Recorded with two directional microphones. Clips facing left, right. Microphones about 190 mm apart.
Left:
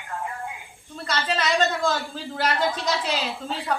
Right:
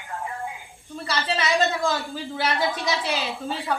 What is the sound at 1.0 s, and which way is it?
A man's voice, 10° right (ahead or behind).